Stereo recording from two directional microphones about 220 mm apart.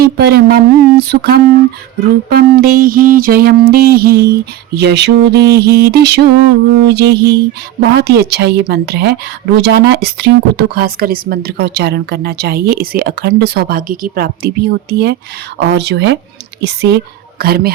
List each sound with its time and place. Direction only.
0.0 s a woman's voice: 45° right (ahead or behind)